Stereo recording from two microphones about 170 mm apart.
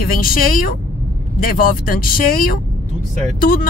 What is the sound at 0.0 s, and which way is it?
Speech, 60° left (ahead or behind).